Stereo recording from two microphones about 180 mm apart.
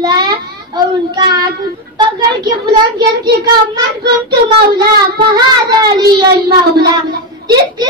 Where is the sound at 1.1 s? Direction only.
20° right (ahead or behind).